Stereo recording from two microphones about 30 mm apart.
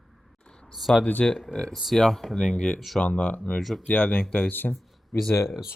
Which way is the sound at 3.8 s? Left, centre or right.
Left.